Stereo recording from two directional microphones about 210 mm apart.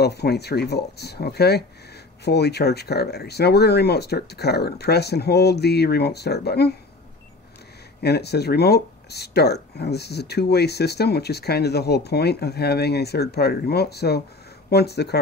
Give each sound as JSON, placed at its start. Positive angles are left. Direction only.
{"t": 0.0, "sound": "speech", "side_deg": 50}
{"t": 8.0, "sound": "speech", "side_deg": 50}